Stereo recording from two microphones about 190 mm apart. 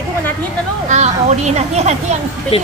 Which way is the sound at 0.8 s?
35° right (ahead or behind).